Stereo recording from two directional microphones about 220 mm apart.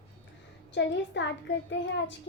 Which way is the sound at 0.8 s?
50° left (ahead or behind).